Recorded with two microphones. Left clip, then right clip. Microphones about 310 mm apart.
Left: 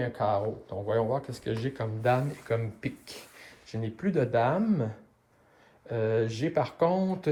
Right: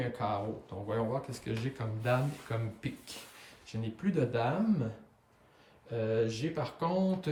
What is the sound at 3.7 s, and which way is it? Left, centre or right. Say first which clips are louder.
Speech: left 5 dB; centre.